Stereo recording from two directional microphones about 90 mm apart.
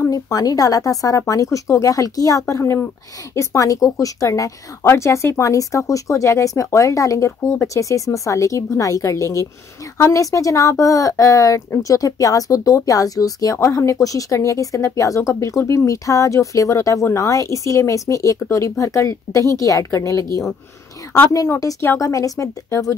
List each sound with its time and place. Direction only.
0.0 s speech: 40° left (ahead or behind)